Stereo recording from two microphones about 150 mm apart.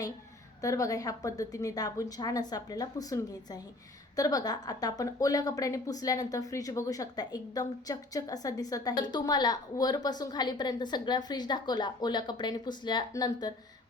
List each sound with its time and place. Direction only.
0.6 s a woman's voice: 20° left (ahead or behind)